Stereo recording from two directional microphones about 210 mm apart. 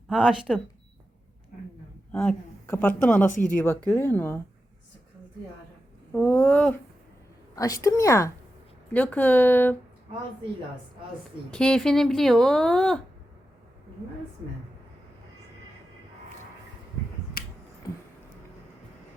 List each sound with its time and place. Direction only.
0.1 s speech: 5° right (ahead or behind)
2.1 s a woman's voice: 10° left (ahead or behind)
6.1 s a woman's voice: 10° left (ahead or behind)
11.5 s speech: 5° left (ahead or behind)
17.4 s finger snapping: 45° left (ahead or behind)